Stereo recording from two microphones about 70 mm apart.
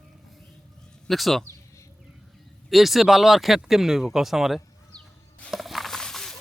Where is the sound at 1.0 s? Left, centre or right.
Centre.